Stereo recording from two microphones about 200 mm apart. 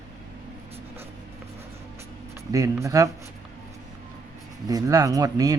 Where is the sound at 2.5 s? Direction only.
15° right (ahead or behind).